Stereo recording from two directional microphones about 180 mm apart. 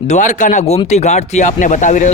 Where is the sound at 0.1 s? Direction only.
45° left (ahead or behind).